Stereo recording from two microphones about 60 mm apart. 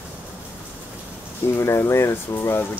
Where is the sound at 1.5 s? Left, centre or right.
Left.